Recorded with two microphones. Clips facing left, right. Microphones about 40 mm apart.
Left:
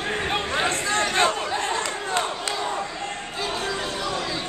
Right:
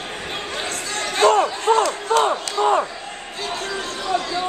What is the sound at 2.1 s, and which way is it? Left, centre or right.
Crowd, right.